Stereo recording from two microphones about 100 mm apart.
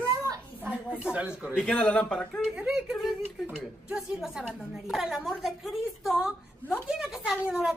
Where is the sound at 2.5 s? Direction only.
10° right (ahead or behind).